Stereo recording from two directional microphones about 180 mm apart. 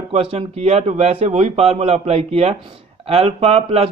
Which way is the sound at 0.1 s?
35° right (ahead or behind).